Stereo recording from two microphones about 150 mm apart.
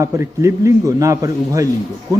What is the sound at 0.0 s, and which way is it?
A man's voice, 20° right (ahead or behind).